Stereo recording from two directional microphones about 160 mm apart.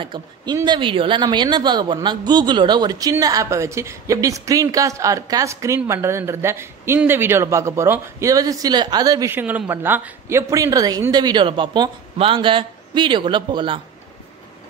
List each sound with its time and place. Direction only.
0.0 s speech: 30° right (ahead or behind)